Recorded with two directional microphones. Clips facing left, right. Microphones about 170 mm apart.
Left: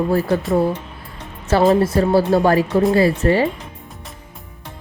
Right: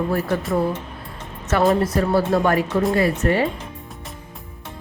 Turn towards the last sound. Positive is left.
turn(degrees=30)  # may be behind; listen again after turning